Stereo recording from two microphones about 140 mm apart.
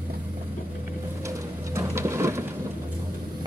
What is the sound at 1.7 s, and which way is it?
Sewing machine, 20° right (ahead or behind).